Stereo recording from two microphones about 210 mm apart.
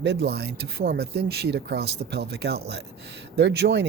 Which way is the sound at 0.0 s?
55° right (ahead or behind).